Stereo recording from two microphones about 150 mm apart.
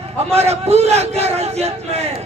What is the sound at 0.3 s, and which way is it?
A man's voice, 45° right (ahead or behind).